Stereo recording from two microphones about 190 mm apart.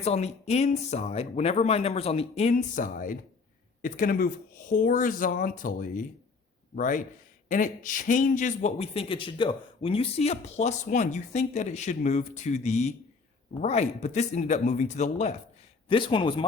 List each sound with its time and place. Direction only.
0.0 s speech: 35° left (ahead or behind)
15.9 s speech: 25° left (ahead or behind)